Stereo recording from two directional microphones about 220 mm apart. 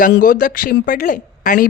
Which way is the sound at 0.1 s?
40° left (ahead or behind).